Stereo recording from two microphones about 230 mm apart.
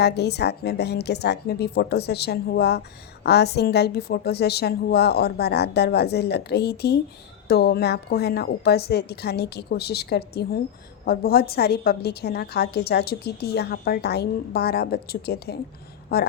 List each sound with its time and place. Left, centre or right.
0.0 s a woman's voice: left